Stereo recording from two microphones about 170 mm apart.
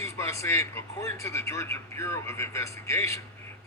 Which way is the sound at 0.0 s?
15° left (ahead or behind).